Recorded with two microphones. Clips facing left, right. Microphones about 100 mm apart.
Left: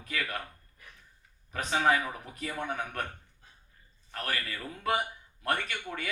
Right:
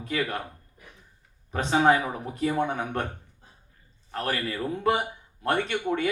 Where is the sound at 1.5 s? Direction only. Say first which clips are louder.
Right 6 dB; 30° right (ahead or behind).